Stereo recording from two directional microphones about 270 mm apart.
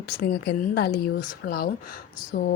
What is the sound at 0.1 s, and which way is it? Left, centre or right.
Speech, left.